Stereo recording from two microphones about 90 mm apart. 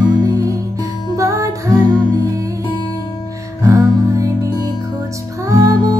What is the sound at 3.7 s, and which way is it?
Music, 35° right (ahead or behind).